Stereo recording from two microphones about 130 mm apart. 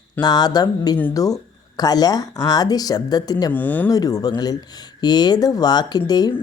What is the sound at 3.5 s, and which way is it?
Speech, 15° left (ahead or behind).